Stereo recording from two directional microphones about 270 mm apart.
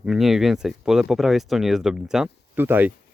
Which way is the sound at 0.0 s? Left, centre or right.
Centre.